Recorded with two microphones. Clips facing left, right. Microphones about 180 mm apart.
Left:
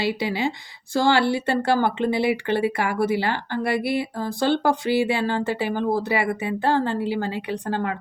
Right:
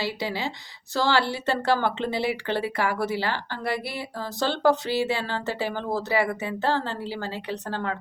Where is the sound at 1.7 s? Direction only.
15° left (ahead or behind).